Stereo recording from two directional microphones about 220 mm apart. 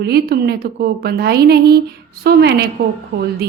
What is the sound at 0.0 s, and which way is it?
A woman's voice, 45° right (ahead or behind).